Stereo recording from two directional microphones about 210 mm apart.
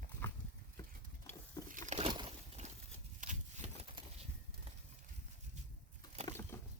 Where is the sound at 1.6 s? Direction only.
35° right (ahead or behind).